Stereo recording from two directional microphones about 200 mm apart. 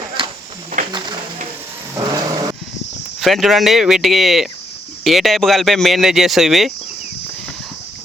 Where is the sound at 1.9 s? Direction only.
15° right (ahead or behind).